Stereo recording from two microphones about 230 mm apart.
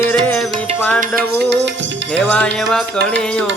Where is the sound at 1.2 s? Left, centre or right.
Right.